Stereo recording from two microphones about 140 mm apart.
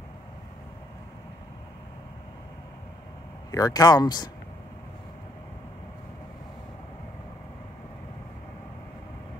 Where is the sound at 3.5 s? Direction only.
25° left (ahead or behind).